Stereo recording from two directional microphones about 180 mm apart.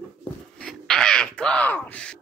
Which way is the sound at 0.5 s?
5° left (ahead or behind).